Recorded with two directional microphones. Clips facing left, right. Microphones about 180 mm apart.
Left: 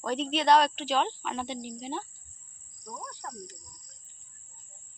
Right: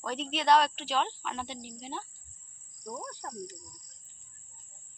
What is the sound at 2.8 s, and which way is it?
Speech, 40° right (ahead or behind).